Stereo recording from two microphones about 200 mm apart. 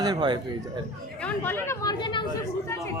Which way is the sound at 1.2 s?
10° left (ahead or behind).